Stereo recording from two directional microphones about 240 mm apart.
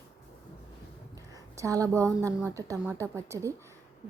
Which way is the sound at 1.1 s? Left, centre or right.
Centre.